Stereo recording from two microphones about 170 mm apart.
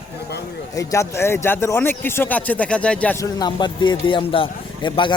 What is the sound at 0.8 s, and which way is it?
Speech, 20° left (ahead or behind).